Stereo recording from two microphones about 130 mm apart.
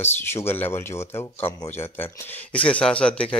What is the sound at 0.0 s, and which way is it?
Speech, 20° left (ahead or behind).